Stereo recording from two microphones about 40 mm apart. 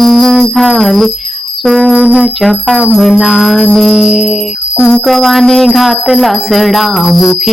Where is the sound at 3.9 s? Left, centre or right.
Centre.